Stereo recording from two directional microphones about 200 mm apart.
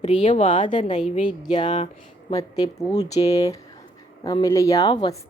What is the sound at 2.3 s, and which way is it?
A woman's voice, 15° left (ahead or behind).